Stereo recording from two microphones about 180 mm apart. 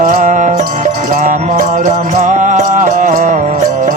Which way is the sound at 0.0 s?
45° right (ahead or behind).